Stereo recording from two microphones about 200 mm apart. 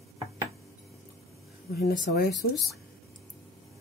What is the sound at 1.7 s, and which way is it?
Speech, 50° left (ahead or behind).